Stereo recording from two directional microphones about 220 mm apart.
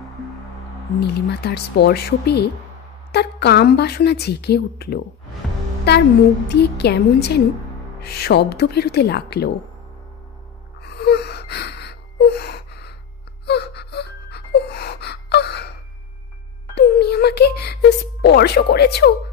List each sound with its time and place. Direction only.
0.9 s a woman's voice: 50° left (ahead or behind)
6.5 s a woman's voice: 50° left (ahead or behind)
10.8 s gasp: 50° left (ahead or behind)
16.7 s a sound: 50° left (ahead or behind)